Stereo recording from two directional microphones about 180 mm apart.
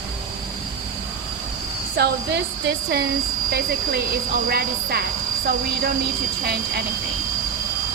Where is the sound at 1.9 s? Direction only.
65° right (ahead or behind).